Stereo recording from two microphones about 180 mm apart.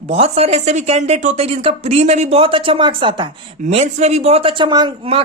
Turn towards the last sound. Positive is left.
turn(degrees=-30)  # may be behind; listen again after turning